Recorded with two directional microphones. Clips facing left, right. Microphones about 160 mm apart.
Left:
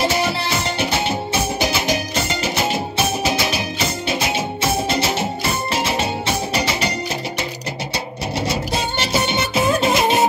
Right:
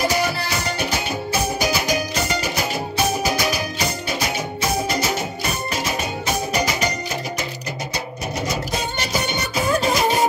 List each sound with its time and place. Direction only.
0.0 s music: 25° left (ahead or behind)
8.5 s music: 30° left (ahead or behind)